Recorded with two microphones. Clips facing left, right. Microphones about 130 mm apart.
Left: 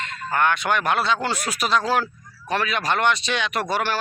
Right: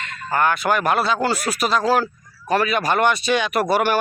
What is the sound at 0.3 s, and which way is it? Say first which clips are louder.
A man's voice: right 2 dB; 5° right (ahead or behind).